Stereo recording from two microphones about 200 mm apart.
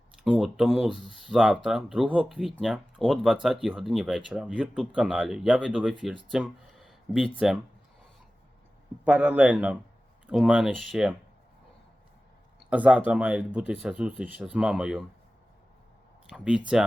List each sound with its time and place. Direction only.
0.3 s speech: centre (ahead or behind)
9.0 s a man's voice: 5° right (ahead or behind)
12.7 s a man's voice: 5° right (ahead or behind)
16.3 s speech: 5° right (ahead or behind)